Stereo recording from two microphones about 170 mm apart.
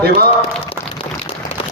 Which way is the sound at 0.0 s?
65° right (ahead or behind).